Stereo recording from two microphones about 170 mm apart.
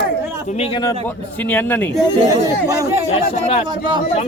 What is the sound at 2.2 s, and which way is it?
Speech, 20° right (ahead or behind).